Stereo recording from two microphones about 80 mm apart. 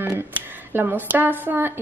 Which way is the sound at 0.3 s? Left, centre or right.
Right.